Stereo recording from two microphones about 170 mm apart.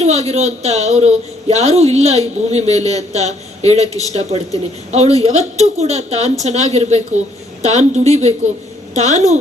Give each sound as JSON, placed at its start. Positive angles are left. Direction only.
{"t": 0.0, "sound": "a woman's voice", "side_deg": -40}